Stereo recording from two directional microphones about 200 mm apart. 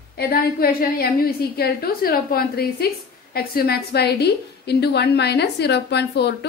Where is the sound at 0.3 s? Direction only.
45° left (ahead or behind).